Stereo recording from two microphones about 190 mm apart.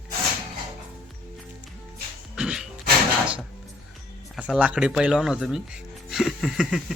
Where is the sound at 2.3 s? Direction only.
5° right (ahead or behind).